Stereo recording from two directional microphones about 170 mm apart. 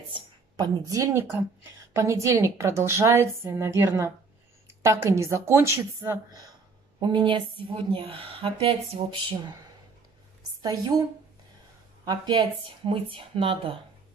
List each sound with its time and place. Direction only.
0.1 s a woman's voice: 20° right (ahead or behind)
10.6 s a woman's voice: 25° right (ahead or behind)
12.0 s a woman's voice: 25° right (ahead or behind)